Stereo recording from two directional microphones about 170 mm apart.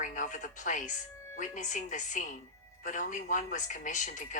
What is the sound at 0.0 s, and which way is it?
Speech, 50° left (ahead or behind).